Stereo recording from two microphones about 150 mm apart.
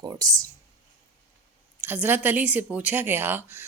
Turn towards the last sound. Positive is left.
turn(degrees=-15)  # may be behind; listen again after turning